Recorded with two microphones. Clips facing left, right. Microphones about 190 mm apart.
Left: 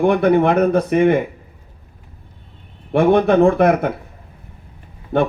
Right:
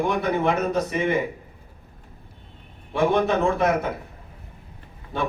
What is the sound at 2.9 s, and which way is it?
Speech, 55° left (ahead or behind).